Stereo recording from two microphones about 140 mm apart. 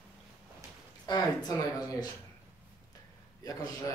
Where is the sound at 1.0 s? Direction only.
30° left (ahead or behind).